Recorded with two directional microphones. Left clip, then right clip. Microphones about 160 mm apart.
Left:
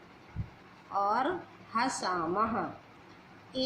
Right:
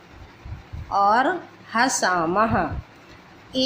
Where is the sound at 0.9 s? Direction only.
40° right (ahead or behind).